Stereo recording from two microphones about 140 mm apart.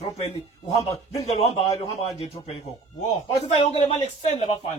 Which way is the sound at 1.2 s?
50° left (ahead or behind).